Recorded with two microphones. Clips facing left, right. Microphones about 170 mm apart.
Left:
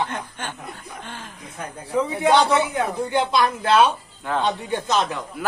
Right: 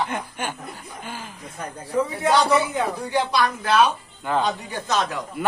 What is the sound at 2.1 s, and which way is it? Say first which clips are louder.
Speech: left 2 dB; 20° left (ahead or behind).